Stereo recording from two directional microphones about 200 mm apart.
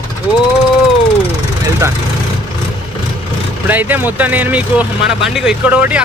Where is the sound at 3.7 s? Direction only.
10° right (ahead or behind).